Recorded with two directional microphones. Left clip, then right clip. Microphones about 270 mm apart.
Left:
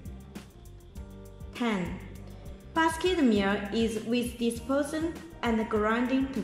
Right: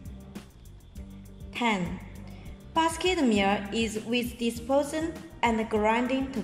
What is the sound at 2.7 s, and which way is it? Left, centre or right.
A woman's voice, centre.